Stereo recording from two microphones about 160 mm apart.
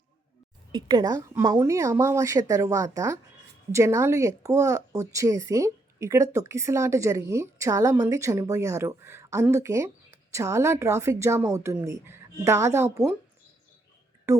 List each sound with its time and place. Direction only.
0.7 s a woman's voice: 25° right (ahead or behind)
14.3 s speech: 20° right (ahead or behind)